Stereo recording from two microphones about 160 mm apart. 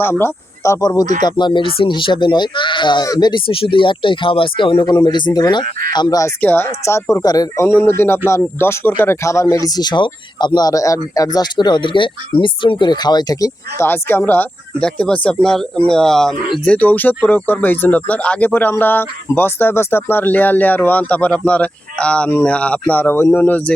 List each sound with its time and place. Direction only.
0.0 s speech: 15° left (ahead or behind)